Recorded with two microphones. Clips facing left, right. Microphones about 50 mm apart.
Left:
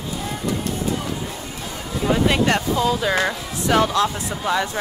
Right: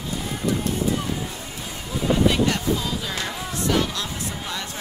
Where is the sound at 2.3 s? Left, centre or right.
Left.